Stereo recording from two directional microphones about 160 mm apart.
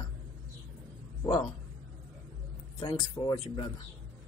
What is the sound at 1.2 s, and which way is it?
Speech, 25° left (ahead or behind).